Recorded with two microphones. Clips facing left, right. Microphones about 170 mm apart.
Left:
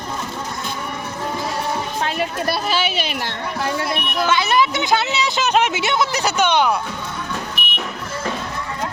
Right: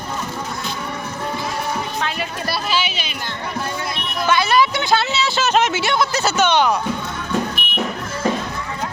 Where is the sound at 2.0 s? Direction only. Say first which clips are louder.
Left 3 dB; 50° left (ahead or behind); by 4.0 s 80° left.